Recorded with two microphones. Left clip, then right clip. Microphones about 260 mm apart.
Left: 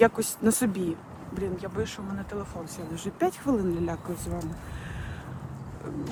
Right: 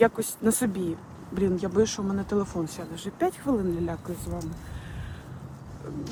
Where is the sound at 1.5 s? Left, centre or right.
Right.